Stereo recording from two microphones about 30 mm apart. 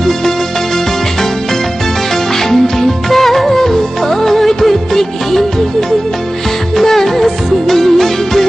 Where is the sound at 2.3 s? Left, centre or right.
Centre.